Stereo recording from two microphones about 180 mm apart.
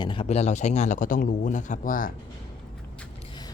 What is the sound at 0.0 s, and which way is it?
A man's voice, 30° left (ahead or behind).